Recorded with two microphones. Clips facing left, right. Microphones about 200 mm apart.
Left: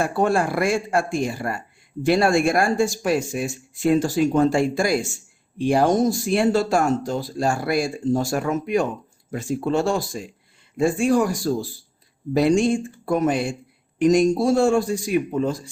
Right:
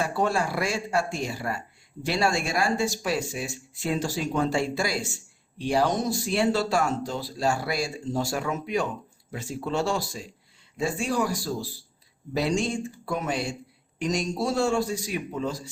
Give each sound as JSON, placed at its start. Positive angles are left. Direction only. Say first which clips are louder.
{"t": 0.0, "sound": "speech", "louder": "left 5 dB", "side_deg": 50}